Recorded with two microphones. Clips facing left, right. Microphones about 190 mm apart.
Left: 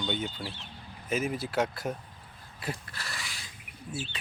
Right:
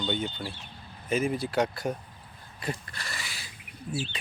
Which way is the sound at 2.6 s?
5° left (ahead or behind).